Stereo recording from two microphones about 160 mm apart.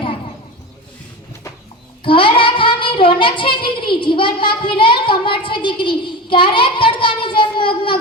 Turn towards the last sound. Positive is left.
turn(degrees=30)  # may be behind; listen again after turning